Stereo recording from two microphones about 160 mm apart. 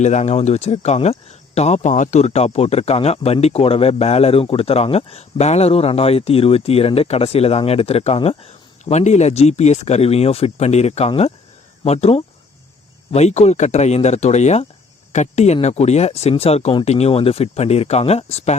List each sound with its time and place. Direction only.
0.0 s speech: 45° left (ahead or behind)